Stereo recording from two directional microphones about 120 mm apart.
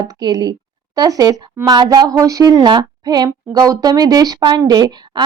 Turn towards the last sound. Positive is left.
turn(degrees=-35)  # may be behind; listen again after turning